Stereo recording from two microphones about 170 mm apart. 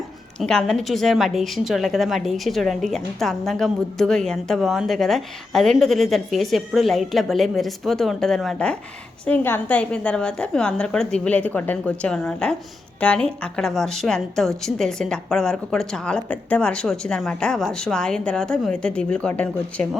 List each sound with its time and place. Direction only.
0.3 s a woman's voice: 5° left (ahead or behind)